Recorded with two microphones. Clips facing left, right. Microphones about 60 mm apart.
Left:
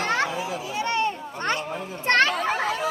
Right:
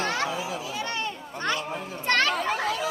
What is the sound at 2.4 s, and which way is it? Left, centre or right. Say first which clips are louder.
Chatter: left 2 dB; centre.